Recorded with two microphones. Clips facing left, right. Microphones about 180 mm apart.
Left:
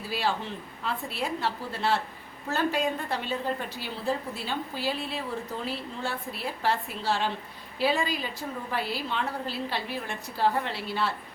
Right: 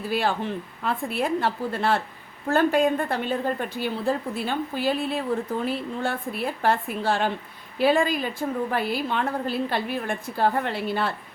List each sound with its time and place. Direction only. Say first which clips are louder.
0.1 s a woman's voice: right 4 dB; 55° right (ahead or behind)